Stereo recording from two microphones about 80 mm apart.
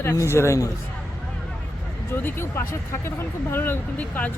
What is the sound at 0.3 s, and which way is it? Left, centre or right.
Speech, left.